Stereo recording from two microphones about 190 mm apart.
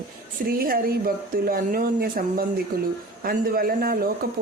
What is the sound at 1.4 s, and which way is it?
Speech, 50° right (ahead or behind).